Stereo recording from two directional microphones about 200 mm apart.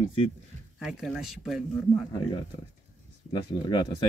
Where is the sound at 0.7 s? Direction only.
Centre (ahead or behind).